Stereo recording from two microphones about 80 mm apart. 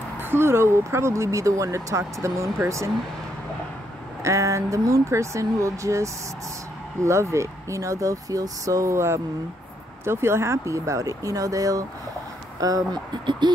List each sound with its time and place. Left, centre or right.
0.2 s speech: right
4.2 s speech: right
13.2 s speech: right